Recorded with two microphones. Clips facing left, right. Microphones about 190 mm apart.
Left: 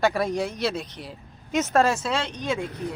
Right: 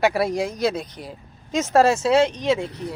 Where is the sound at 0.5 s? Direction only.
40° right (ahead or behind).